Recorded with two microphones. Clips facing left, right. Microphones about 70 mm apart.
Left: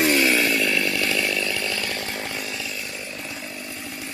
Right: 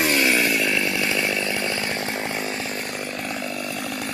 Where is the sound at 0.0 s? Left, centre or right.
Centre.